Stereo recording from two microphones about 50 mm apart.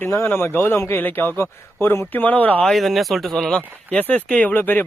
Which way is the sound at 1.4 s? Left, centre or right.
Left.